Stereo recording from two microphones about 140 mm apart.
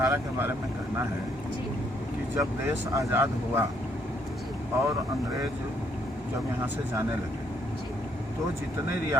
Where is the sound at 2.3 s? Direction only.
20° right (ahead or behind).